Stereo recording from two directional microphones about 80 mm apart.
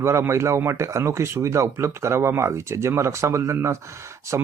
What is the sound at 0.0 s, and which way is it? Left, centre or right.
Speech, right.